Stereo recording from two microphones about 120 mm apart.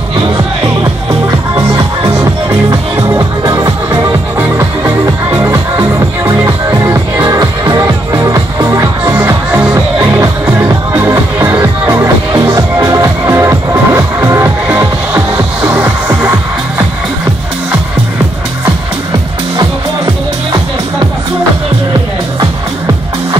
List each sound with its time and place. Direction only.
3.1 s music: 30° right (ahead or behind)